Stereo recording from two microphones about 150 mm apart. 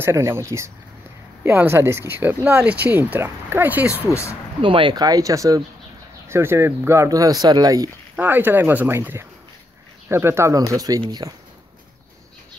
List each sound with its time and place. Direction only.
0.0 s speech: 20° right (ahead or behind)
4.1 s speech: 20° left (ahead or behind)
4.6 s speech: 35° right (ahead or behind)
8.2 s speech: 15° right (ahead or behind)